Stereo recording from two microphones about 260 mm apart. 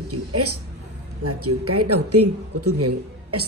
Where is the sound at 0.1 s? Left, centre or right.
Right.